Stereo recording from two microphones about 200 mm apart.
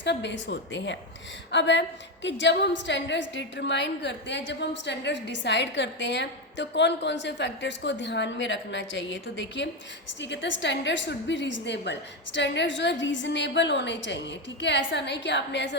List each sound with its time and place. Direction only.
0.0 s a woman's voice: 60° left (ahead or behind)